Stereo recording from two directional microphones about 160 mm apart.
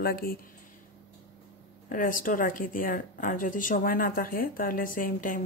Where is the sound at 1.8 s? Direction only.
60° left (ahead or behind).